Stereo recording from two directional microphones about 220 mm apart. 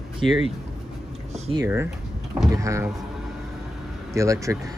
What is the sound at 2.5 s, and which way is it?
Speech, 15° right (ahead or behind).